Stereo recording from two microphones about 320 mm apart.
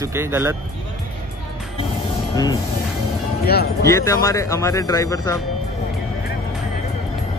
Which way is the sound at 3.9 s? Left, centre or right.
Centre.